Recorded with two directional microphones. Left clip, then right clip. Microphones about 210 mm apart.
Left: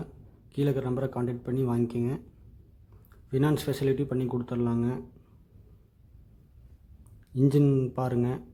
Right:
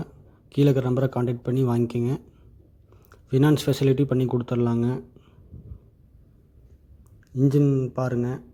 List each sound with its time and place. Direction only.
0.5 s speech: 25° right (ahead or behind)
3.2 s speech: 25° right (ahead or behind)
7.3 s speech: 5° right (ahead or behind)